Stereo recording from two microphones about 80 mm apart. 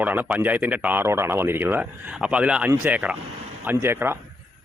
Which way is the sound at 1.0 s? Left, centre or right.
Right.